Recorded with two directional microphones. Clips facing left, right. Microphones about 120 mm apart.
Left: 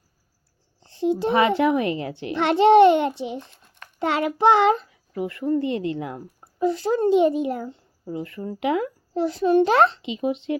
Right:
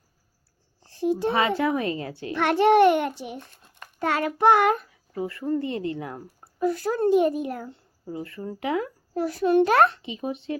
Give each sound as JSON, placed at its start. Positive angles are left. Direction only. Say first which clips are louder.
{"t": 0.9, "sound": "speech", "louder": "left 3 dB", "side_deg": 25}